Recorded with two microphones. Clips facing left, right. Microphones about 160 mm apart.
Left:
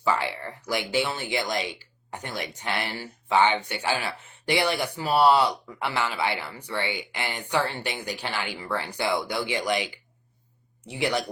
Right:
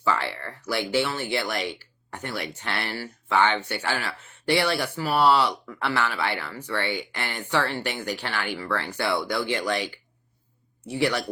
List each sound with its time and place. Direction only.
0.0 s speech: 15° left (ahead or behind)